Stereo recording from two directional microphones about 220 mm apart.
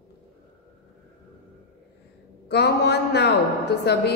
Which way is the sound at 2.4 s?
50° left (ahead or behind).